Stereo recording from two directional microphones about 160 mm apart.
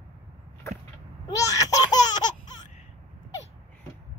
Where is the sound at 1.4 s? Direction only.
20° left (ahead or behind).